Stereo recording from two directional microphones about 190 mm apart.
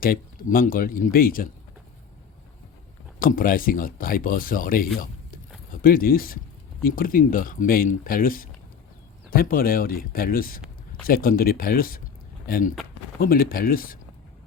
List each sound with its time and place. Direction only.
0.0 s speech: 50° left (ahead or behind)
3.2 s speech: 50° left (ahead or behind)